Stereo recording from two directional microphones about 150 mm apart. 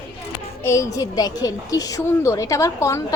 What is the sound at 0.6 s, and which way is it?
A woman's voice, 20° left (ahead or behind).